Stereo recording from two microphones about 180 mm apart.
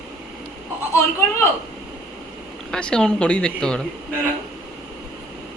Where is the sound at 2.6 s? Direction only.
5° left (ahead or behind).